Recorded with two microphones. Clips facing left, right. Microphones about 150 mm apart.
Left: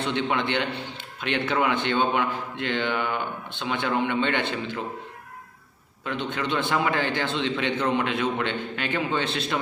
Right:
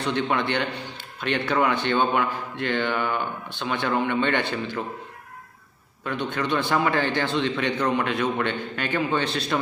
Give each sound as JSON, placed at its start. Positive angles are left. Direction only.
{"t": 0.0, "sound": "speech", "side_deg": 20}
{"t": 6.1, "sound": "speech", "side_deg": 20}